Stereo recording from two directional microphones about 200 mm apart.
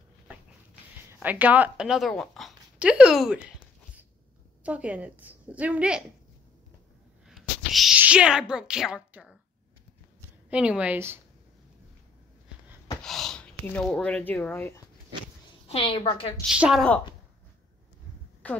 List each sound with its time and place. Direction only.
0.9 s a woman's voice: 10° right (ahead or behind)
7.2 s speech: centre (ahead or behind)
10.5 s a woman's voice: 5° right (ahead or behind)
13.0 s speech: centre (ahead or behind)
15.7 s a woman's voice: 30° left (ahead or behind)
16.4 s speech: 5° right (ahead or behind)
18.4 s speech: 5° left (ahead or behind)